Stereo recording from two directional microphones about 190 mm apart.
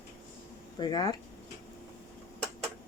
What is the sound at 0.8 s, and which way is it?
Speech, 20° left (ahead or behind).